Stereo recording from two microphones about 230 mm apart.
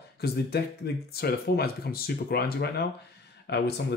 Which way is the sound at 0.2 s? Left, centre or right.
Left.